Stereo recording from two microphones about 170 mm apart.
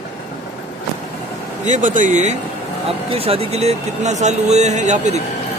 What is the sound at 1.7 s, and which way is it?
Speech, 50° right (ahead or behind).